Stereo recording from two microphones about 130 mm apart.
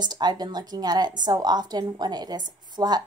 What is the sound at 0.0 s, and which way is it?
A woman's voice, 30° right (ahead or behind).